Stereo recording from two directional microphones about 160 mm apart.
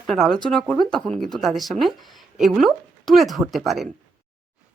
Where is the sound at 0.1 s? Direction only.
Centre (ahead or behind).